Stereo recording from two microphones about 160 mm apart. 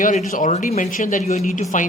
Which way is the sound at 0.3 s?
55° left (ahead or behind).